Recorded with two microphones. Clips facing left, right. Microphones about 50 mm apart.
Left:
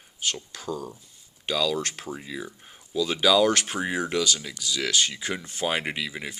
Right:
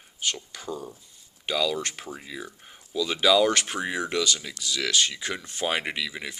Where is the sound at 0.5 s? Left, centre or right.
Right.